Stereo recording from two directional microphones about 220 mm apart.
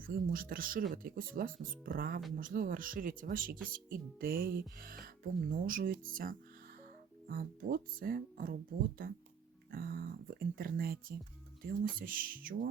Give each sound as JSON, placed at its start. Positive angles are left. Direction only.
{"t": 0.0, "sound": "speech", "side_deg": -40}
{"t": 9.7, "sound": "speech", "side_deg": -40}